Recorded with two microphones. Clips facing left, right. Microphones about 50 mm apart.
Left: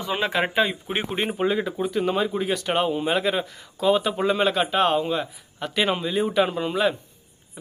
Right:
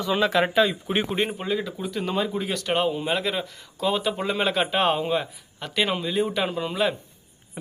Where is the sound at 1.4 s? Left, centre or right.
Left.